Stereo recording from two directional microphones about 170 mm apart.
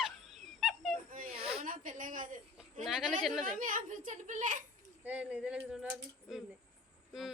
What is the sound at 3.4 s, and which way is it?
A woman's voice, 55° right (ahead or behind).